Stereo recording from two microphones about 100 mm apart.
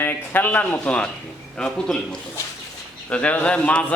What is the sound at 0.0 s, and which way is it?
Speech, 20° left (ahead or behind).